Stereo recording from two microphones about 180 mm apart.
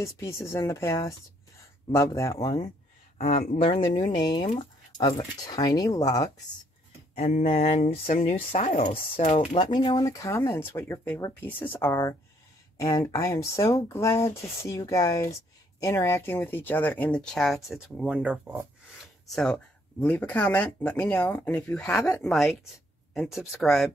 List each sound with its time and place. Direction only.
0.0 s speech: 15° left (ahead or behind)
7.2 s speech: 40° left (ahead or behind); by 18.7 s 10° right (ahead or behind)
19.2 s speech: 5° left (ahead or behind)